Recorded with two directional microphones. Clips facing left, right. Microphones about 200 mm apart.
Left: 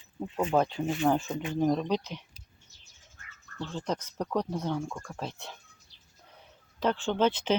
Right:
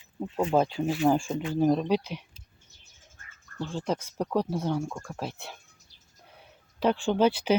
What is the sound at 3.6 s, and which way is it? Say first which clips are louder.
Speech: right 3 dB; 10° right (ahead or behind).